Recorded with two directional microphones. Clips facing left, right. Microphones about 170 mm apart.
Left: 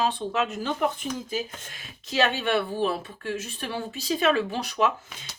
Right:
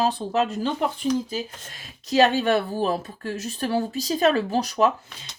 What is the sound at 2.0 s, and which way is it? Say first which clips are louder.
Speech: right 6 dB; 40° right (ahead or behind).